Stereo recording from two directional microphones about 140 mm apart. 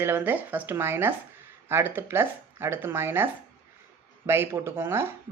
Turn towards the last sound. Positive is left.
turn(degrees=-15)  # may be behind; listen again after turning